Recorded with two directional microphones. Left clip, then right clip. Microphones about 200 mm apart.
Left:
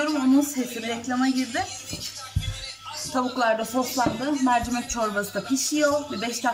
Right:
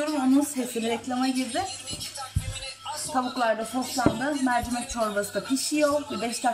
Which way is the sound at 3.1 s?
5° right (ahead or behind).